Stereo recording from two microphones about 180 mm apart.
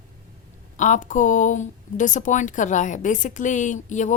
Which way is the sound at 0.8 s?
45° left (ahead or behind).